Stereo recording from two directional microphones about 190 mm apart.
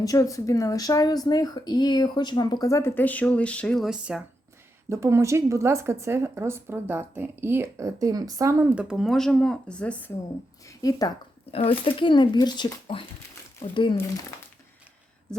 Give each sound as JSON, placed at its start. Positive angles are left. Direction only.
{"t": 0.0, "sound": "speech", "side_deg": 20}
{"t": 4.9, "sound": "a woman's voice", "side_deg": -15}
{"t": 10.7, "sound": "speech", "side_deg": 20}
{"t": 15.3, "sound": "a sound", "side_deg": 5}